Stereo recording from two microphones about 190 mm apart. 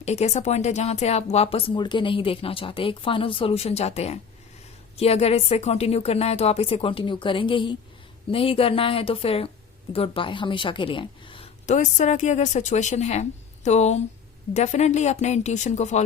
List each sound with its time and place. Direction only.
0.0 s a woman's voice: 35° left (ahead or behind)